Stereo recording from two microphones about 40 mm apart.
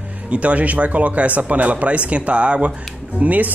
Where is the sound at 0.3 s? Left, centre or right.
Right.